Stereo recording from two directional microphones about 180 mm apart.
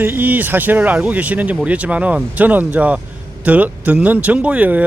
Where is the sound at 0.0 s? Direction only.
10° right (ahead or behind).